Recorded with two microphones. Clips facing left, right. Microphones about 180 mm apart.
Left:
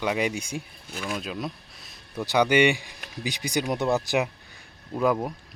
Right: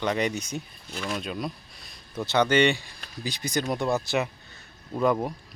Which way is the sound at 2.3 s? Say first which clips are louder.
Left 1 dB; 10° left (ahead or behind).